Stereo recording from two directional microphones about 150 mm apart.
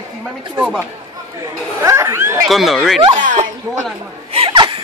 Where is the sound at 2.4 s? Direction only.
Centre (ahead or behind).